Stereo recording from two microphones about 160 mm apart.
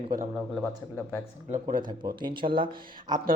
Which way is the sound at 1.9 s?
25° right (ahead or behind).